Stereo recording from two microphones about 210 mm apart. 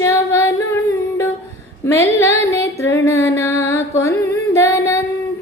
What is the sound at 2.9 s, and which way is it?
Female singing, 15° left (ahead or behind).